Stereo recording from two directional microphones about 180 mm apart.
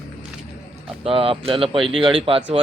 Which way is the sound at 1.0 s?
30° right (ahead or behind).